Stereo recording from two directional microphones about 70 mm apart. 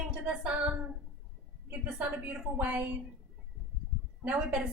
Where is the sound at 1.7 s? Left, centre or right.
Centre.